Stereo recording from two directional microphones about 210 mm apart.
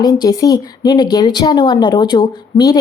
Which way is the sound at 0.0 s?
15° left (ahead or behind).